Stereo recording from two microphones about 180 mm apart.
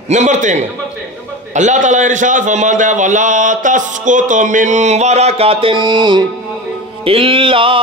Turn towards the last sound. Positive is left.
turn(degrees=-30)  # may be behind; listen again after turning